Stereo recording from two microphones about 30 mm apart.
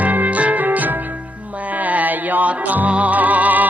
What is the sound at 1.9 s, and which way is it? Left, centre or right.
Music, right.